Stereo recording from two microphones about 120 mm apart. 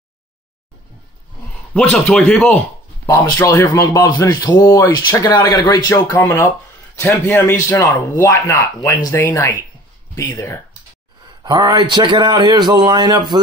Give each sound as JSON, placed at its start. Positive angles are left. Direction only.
{"t": 1.7, "sound": "a man's voice", "side_deg": 10}
{"t": 3.1, "sound": "speech", "side_deg": 25}
{"t": 6.1, "sound": "a man's voice", "side_deg": 20}
{"t": 11.4, "sound": "a man's voice", "side_deg": -35}